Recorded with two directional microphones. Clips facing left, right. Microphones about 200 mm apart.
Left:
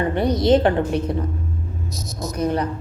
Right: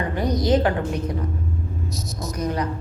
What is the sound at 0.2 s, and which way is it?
Speech, 25° left (ahead or behind).